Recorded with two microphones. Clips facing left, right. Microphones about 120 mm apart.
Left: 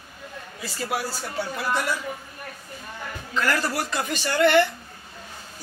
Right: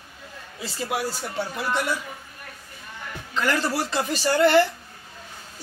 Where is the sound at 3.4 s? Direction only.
20° right (ahead or behind).